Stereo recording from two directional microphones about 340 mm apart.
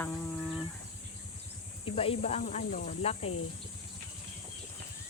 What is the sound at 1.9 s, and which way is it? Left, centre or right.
Speech, centre.